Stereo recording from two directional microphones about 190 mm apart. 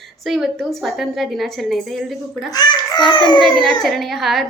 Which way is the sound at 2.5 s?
20° left (ahead or behind).